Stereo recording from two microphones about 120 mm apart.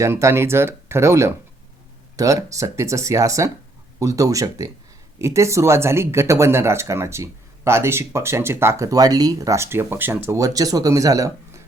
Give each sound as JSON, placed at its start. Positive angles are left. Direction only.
{"t": 0.0, "sound": "speech", "side_deg": -25}